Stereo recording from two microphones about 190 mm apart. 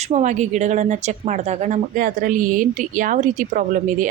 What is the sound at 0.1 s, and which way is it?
Speech, 40° right (ahead or behind).